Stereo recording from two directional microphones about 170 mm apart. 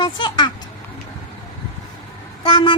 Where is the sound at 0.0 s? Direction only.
25° left (ahead or behind).